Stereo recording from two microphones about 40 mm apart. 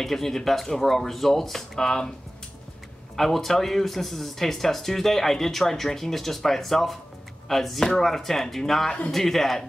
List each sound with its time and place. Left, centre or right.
0.0 s speech: centre
1.8 s speech: centre
3.2 s speech: centre